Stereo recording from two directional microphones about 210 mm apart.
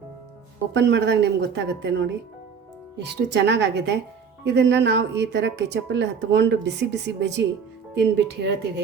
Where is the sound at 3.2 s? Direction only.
55° right (ahead or behind).